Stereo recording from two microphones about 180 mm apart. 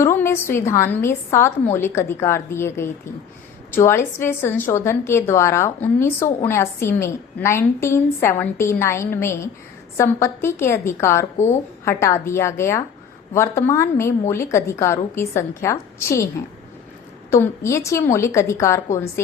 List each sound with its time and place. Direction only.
0.0 s a woman's voice: 15° left (ahead or behind)
17.3 s a woman's voice: 15° left (ahead or behind)